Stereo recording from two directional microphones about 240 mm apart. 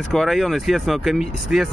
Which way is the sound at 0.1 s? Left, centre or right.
Centre.